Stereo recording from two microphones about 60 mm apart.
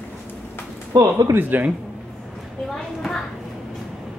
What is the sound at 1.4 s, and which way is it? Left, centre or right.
Speech, right.